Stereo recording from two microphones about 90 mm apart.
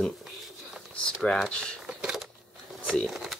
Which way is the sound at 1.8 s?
5° right (ahead or behind).